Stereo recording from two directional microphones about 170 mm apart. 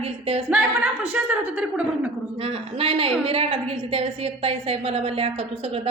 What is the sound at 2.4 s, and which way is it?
A woman's voice, 35° right (ahead or behind).